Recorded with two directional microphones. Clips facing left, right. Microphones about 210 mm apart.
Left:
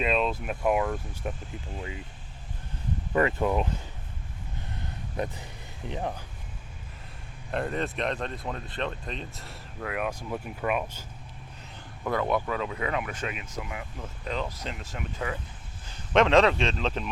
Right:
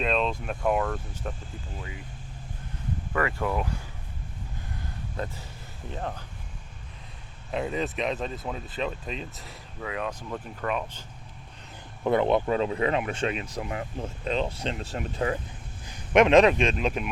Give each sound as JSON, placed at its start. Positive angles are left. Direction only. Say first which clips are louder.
{"t": 0.0, "sound": "speech", "louder": "even", "side_deg": 5}
{"t": 3.1, "sound": "speech", "louder": "left 3 dB", "side_deg": 20}
{"t": 5.1, "sound": "speech", "louder": "left 3 dB", "side_deg": 15}
{"t": 7.5, "sound": "speech", "louder": "right 1 dB", "side_deg": 0}
{"t": 12.0, "sound": "speech", "louder": "right 5 dB", "side_deg": -25}
{"t": 14.3, "sound": "speech", "louder": "right 4 dB", "side_deg": -25}
{"t": 15.9, "sound": "a man's voice", "louder": "right 3 dB", "side_deg": -15}